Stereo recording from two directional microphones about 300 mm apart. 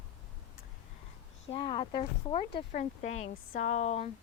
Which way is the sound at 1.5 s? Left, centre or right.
Centre.